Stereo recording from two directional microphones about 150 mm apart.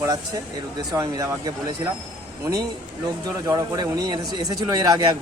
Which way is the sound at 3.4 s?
25° right (ahead or behind).